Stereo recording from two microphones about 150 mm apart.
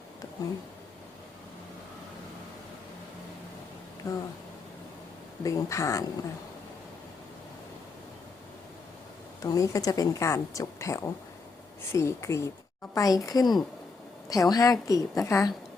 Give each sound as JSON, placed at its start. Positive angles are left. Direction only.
{"t": 4.0, "sound": "a sound", "side_deg": 20}
{"t": 5.4, "sound": "a woman's voice", "side_deg": 20}
{"t": 9.4, "sound": "a woman's voice", "side_deg": 20}